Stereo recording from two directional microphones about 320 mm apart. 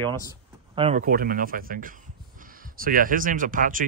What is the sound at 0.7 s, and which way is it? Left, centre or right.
Speech, right.